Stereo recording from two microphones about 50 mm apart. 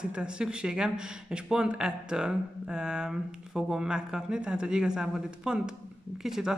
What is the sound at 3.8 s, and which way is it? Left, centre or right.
Speech, centre.